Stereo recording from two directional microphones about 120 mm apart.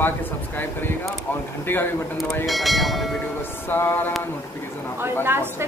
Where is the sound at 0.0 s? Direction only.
15° left (ahead or behind).